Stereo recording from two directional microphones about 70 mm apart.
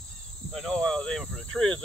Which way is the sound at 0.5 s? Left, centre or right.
Centre.